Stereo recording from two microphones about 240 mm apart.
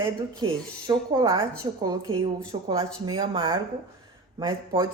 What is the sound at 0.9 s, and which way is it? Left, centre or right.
A woman's voice, centre.